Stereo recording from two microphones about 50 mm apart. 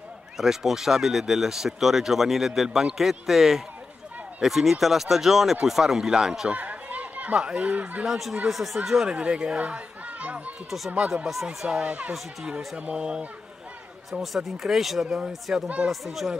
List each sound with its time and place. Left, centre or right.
0.4 s speech: centre
6.5 s chatter: right
8.5 s speech: centre
9.1 s speech: right
11.0 s speech: centre
14.2 s speech: centre